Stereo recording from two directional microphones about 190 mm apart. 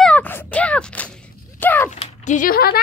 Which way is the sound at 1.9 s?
40° left (ahead or behind).